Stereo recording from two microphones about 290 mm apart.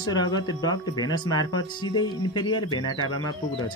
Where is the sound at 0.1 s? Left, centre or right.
Centre.